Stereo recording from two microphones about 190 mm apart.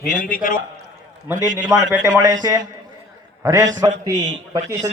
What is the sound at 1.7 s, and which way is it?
Speech, 20° right (ahead or behind).